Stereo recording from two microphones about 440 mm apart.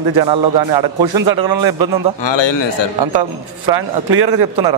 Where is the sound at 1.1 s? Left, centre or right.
Right.